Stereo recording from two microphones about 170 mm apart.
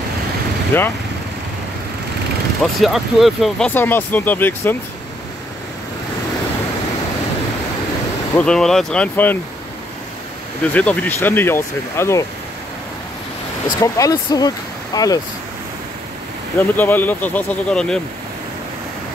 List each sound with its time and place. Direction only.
0.7 s speech: 10° left (ahead or behind)
2.6 s speech: centre (ahead or behind)
8.4 s speech: 5° left (ahead or behind)
10.6 s speech: 10° left (ahead or behind)
13.7 s speech: 20° left (ahead or behind)
16.7 s speech: 10° left (ahead or behind)